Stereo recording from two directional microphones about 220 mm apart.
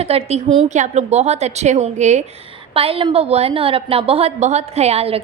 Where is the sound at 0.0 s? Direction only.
25° right (ahead or behind).